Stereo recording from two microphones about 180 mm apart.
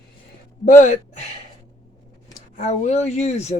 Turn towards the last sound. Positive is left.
turn(degrees=35)  # may be behind; listen again after turning